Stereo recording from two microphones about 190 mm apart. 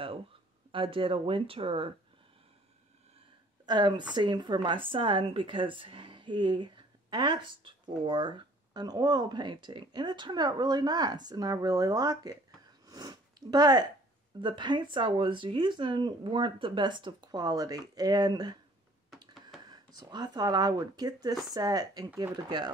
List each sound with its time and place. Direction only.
0.7 s a woman's voice: 25° right (ahead or behind)
3.6 s a woman's voice: 20° right (ahead or behind)
12.8 s sniff: 20° right (ahead or behind)
14.4 s a woman's voice: 25° right (ahead or behind)
19.6 s a woman's voice: 20° right (ahead or behind)